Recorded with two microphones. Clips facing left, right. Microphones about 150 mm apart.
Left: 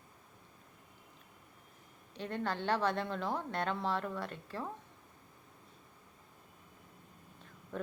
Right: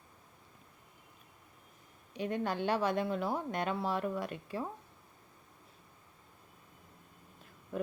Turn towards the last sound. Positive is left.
turn(degrees=-10)  # may be behind; listen again after turning